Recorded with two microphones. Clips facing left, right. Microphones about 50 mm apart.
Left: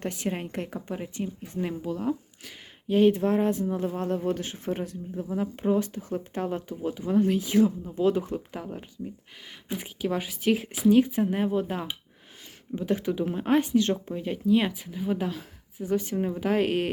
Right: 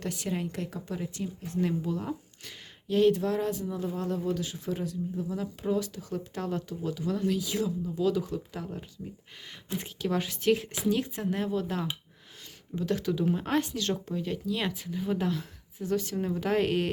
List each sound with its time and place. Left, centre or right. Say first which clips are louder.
0.0 s speech: left 2 dB; left
1.5 s speech: right 1 dB; centre
2.8 s speech: left 3 dB; left
8.5 s speech: left 2 dB; centre